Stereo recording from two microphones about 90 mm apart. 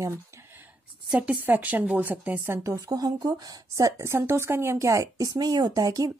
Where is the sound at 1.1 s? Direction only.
15° right (ahead or behind).